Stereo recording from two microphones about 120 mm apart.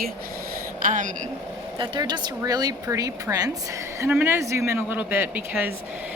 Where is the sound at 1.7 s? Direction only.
40° right (ahead or behind).